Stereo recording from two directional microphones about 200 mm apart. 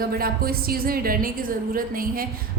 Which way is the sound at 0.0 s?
50° right (ahead or behind).